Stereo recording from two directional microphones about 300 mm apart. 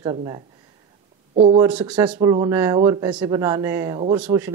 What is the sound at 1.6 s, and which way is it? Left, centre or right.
Speech, centre.